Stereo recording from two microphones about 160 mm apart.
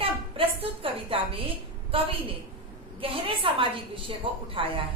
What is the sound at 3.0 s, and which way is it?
A woman's voice, 35° right (ahead or behind).